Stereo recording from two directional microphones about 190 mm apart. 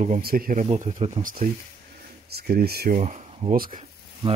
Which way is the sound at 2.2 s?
55° right (ahead or behind).